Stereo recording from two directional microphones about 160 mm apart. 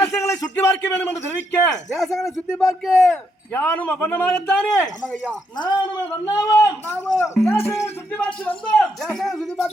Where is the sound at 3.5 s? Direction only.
15° left (ahead or behind).